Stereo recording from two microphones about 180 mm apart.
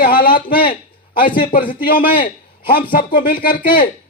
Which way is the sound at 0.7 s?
50° left (ahead or behind).